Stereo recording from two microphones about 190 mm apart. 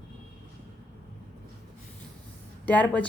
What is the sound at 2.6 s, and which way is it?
Speech, 10° left (ahead or behind).